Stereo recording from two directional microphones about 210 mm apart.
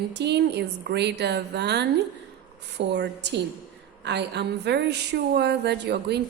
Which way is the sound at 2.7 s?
55° right (ahead or behind).